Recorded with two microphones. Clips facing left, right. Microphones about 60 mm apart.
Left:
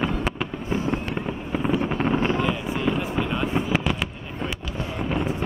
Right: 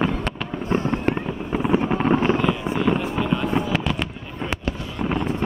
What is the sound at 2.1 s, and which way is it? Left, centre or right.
Vehicle, right.